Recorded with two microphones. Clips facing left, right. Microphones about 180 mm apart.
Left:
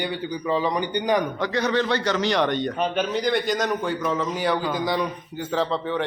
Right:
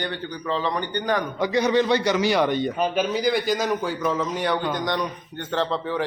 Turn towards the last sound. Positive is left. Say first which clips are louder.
# even
turn(degrees=0)  # may be behind; listen again after turning